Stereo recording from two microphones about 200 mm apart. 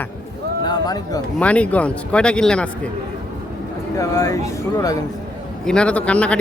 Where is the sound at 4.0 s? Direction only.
15° left (ahead or behind).